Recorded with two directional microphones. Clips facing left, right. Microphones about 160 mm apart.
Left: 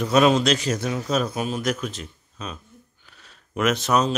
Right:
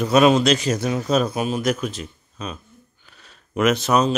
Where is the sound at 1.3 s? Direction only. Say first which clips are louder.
Right 3 dB; 15° right (ahead or behind).